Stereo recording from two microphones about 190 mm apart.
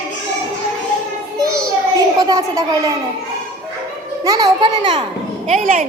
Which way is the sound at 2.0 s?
20° right (ahead or behind).